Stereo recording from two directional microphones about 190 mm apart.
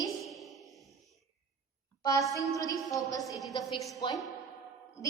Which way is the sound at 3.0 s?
20° left (ahead or behind).